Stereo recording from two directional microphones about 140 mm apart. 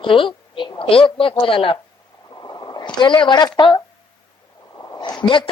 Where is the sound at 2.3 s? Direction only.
25° left (ahead or behind).